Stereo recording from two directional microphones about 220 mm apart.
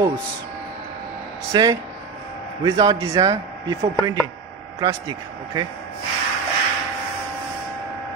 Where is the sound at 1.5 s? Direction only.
20° right (ahead or behind).